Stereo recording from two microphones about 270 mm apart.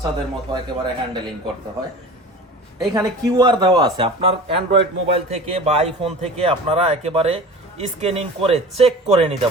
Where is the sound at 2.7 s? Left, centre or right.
Centre.